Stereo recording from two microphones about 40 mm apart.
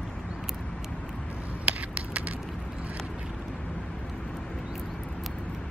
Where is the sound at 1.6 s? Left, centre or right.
Right.